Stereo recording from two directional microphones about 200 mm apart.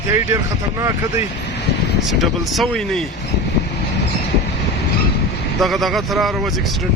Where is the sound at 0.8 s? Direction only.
15° right (ahead or behind).